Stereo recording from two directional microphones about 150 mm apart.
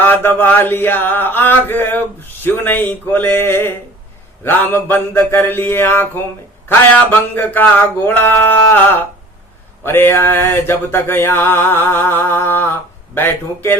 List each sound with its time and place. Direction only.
0.0 s mantra: 15° left (ahead or behind)